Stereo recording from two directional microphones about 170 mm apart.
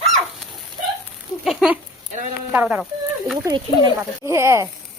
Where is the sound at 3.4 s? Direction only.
25° right (ahead or behind).